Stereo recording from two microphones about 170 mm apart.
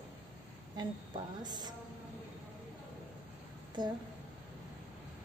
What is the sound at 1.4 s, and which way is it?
Speech, 25° right (ahead or behind).